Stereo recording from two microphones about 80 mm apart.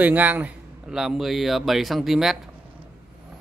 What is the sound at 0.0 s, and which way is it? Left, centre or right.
Speech, right.